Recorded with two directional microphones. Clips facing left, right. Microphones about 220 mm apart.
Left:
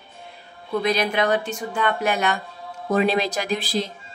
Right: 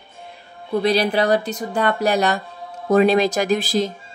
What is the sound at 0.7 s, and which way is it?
Speech, 30° right (ahead or behind).